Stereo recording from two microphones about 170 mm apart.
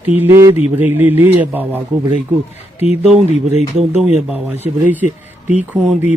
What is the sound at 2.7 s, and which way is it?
Speech, 40° left (ahead or behind).